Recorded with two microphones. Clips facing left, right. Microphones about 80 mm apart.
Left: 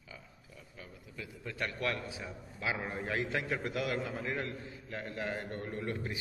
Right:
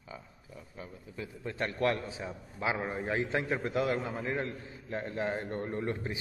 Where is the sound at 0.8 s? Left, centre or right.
Right.